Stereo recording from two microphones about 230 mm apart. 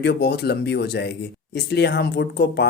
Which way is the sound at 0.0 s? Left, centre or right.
Left.